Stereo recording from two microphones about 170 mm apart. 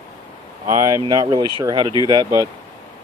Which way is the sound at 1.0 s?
25° right (ahead or behind).